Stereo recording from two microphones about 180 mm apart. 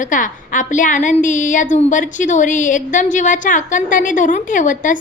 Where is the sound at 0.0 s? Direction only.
45° left (ahead or behind).